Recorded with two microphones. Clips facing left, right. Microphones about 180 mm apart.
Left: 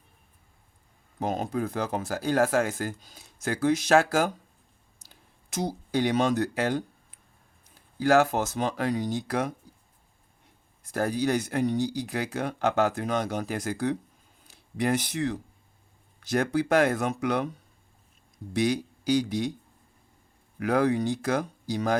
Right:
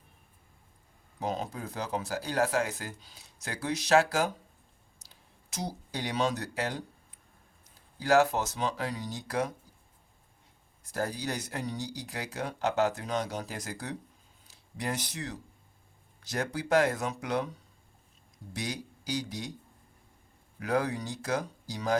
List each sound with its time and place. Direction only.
1.2 s speech: 50° left (ahead or behind)
7.9 s speech: 50° left (ahead or behind)
10.9 s speech: 55° left (ahead or behind)
18.5 s speech: 60° left (ahead or behind)
20.6 s speech: 55° left (ahead or behind)